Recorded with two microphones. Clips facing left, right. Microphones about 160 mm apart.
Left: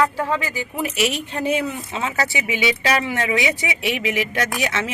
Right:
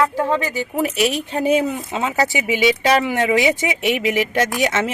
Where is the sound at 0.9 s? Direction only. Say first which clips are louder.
Right 3 dB; 35° right (ahead or behind).